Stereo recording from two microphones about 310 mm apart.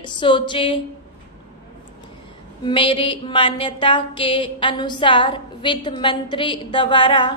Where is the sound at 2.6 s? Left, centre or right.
Centre.